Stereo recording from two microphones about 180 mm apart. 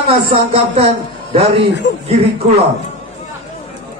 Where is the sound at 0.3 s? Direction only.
30° right (ahead or behind).